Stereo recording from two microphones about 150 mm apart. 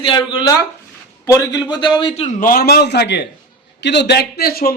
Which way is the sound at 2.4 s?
80° left.